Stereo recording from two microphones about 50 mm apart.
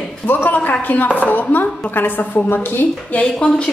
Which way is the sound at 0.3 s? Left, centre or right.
Left.